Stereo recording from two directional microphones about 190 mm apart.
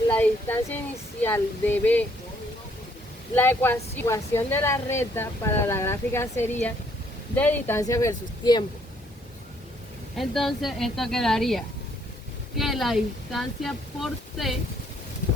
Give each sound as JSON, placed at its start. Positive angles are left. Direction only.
{"t": 0.1, "sound": "a sound", "side_deg": 10}
{"t": 1.2, "sound": "speech", "side_deg": 10}
{"t": 3.3, "sound": "speech", "side_deg": 10}
{"t": 10.2, "sound": "speech", "side_deg": 0}